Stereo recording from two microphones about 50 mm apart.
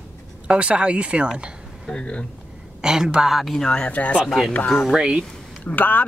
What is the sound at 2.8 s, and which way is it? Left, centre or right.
Speech, centre.